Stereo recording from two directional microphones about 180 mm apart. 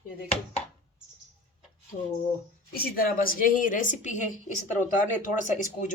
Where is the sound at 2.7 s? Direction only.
50° left (ahead or behind).